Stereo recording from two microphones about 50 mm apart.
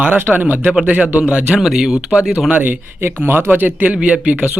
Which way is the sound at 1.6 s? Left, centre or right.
Centre.